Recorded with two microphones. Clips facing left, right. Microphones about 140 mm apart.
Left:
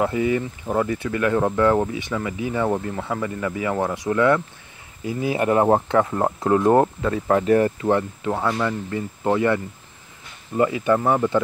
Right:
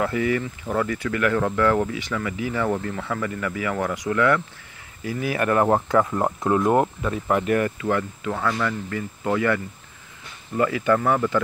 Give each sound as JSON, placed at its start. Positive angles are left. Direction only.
{"t": 0.0, "sound": "speech", "side_deg": 20}